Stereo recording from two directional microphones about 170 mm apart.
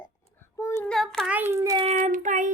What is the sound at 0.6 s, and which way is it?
Child singing, 15° left (ahead or behind).